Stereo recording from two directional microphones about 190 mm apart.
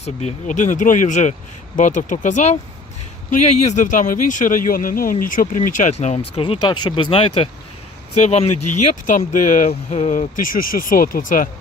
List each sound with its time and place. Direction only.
0.0 s speech: 35° left (ahead or behind)